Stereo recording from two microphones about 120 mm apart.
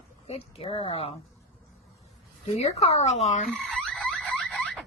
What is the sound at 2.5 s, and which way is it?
Speech, 60° left (ahead or behind).